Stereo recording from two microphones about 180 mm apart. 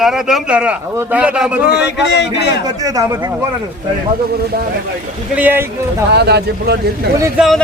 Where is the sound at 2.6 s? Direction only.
20° right (ahead or behind).